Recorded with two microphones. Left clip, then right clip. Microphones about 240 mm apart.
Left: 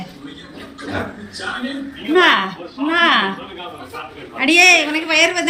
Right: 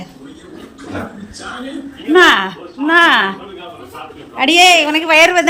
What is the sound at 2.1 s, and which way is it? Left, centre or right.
A woman's voice, centre.